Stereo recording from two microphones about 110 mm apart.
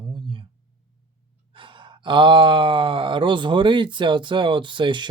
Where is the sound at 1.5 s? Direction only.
50° right (ahead or behind).